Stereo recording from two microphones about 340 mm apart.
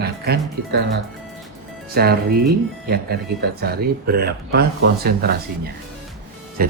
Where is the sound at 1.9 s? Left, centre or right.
Right.